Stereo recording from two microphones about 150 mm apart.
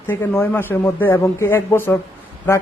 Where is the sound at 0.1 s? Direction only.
15° left (ahead or behind).